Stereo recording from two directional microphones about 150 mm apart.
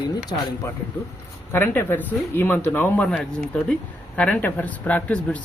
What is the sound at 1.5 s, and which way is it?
Speech, 15° left (ahead or behind).